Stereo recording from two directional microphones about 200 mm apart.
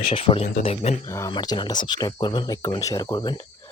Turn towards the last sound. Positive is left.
turn(degrees=20)  # may be behind; listen again after turning